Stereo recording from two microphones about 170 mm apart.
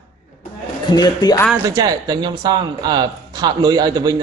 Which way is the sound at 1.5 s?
20° right (ahead or behind).